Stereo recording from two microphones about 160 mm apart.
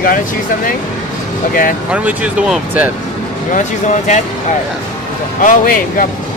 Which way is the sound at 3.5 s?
50° left (ahead or behind).